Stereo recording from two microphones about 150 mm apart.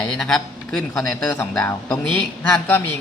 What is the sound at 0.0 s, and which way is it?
A man's voice, 5° left (ahead or behind).